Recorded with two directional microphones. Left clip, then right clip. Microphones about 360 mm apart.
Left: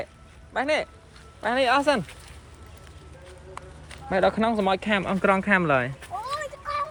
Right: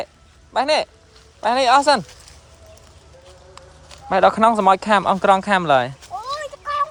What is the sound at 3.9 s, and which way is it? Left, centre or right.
Speech, centre.